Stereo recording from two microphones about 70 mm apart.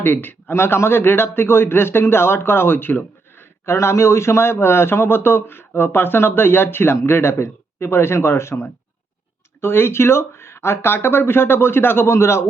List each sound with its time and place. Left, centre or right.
0.0 s a man's voice: left